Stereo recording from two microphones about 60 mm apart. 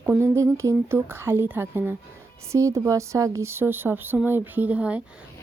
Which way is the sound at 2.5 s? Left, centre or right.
Right.